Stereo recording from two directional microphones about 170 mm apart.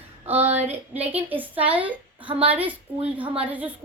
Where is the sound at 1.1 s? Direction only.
10° right (ahead or behind).